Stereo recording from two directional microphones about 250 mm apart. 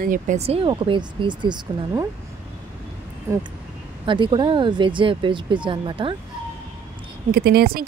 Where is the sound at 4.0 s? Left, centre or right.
Centre.